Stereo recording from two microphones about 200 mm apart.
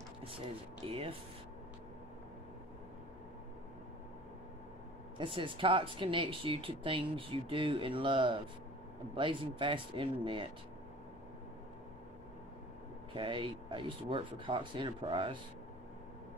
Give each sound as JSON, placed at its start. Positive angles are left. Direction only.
{"t": 0.8, "sound": "speech", "side_deg": -30}
{"t": 5.1, "sound": "speech", "side_deg": -25}
{"t": 13.1, "sound": "speech", "side_deg": -25}